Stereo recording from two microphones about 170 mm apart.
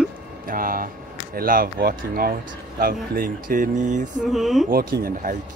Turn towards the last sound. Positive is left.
turn(degrees=-50)  # may be behind; listen again after turning